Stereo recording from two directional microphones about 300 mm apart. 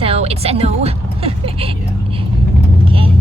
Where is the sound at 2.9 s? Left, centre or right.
Centre.